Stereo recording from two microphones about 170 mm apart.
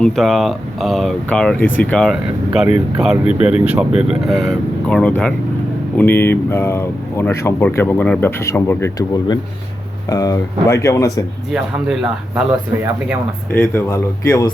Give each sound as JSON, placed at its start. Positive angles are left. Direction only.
{"t": 0.0, "sound": "speech", "side_deg": 0}
{"t": 12.4, "sound": "speech", "side_deg": -5}
{"t": 13.5, "sound": "speech", "side_deg": 10}